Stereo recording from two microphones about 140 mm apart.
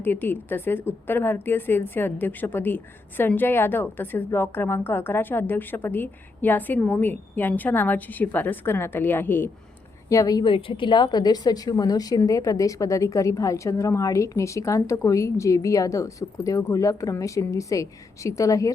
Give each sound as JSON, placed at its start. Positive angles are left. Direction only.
{"t": 0.0, "sound": "a woman's voice", "side_deg": 15}
{"t": 10.1, "sound": "a woman's voice", "side_deg": 25}